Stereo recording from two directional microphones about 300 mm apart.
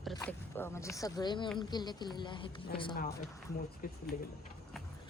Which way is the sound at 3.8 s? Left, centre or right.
Left.